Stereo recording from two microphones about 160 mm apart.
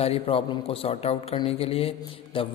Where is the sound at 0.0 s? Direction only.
35° left (ahead or behind).